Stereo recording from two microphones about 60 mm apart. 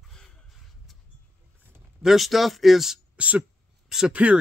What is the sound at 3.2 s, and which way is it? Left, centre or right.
Speech, right.